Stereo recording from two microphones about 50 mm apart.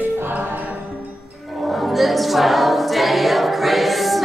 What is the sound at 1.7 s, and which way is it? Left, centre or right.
Music, centre.